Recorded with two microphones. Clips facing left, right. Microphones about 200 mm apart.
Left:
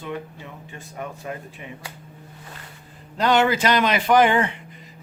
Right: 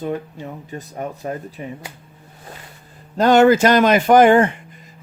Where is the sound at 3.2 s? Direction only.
45° right (ahead or behind).